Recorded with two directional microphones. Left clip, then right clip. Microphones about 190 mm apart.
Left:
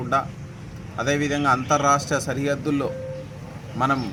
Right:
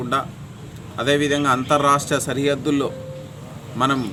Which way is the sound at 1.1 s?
30° right (ahead or behind).